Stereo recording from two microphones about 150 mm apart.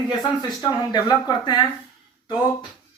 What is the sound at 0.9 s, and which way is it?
Speech, 25° left (ahead or behind).